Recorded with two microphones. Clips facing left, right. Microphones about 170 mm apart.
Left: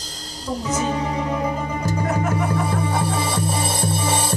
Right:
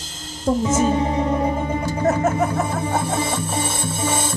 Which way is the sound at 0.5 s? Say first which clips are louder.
Right 8 dB; 50° right (ahead or behind).